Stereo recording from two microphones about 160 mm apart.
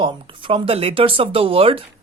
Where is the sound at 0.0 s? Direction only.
35° right (ahead or behind).